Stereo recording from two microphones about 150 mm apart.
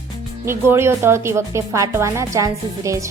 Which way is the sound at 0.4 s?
15° right (ahead or behind).